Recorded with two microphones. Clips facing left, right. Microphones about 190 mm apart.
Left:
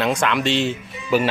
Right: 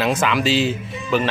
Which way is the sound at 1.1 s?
10° left (ahead or behind).